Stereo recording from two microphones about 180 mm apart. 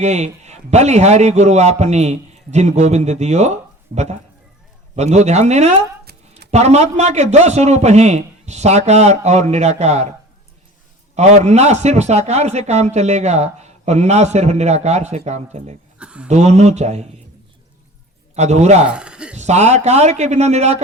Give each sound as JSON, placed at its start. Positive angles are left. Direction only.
{"t": 0.0, "sound": "a man's voice", "side_deg": -40}
{"t": 11.1, "sound": "a man's voice", "side_deg": -40}
{"t": 16.0, "sound": "a sound", "side_deg": -5}
{"t": 16.3, "sound": "a man's voice", "side_deg": -40}
{"t": 18.3, "sound": "a man's voice", "side_deg": -40}
{"t": 18.9, "sound": "speech", "side_deg": -5}
{"t": 19.4, "sound": "a man's voice", "side_deg": -40}